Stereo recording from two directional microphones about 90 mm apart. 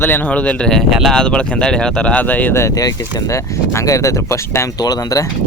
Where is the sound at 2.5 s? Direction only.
35° left (ahead or behind).